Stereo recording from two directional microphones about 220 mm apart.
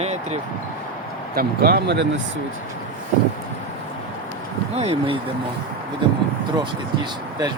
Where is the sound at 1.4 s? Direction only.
45° right (ahead or behind).